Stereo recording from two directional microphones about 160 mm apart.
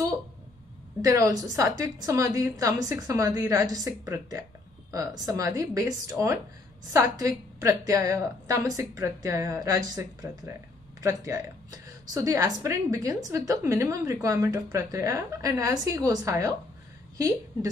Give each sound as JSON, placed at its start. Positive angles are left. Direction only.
{"t": 1.0, "sound": "a woman's voice", "side_deg": -20}